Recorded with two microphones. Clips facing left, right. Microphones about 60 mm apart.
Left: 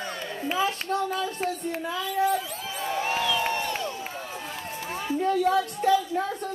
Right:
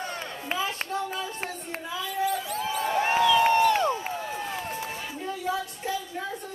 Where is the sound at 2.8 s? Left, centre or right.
Right.